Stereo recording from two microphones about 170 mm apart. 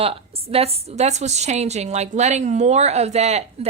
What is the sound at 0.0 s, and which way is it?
A woman's voice, 35° right (ahead or behind).